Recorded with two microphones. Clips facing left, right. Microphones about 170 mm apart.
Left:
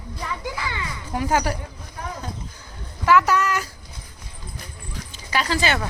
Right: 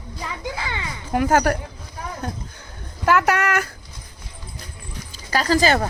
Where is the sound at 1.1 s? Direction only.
50° right (ahead or behind).